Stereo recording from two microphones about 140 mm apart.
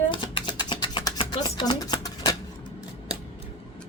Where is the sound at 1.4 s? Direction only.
35° left (ahead or behind).